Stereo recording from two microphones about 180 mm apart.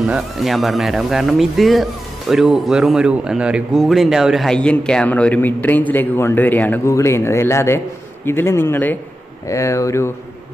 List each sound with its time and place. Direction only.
0.0 s speech: centre (ahead or behind); by 10.1 s 15° left (ahead or behind)